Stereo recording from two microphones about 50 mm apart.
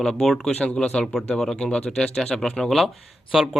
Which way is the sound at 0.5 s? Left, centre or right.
Left.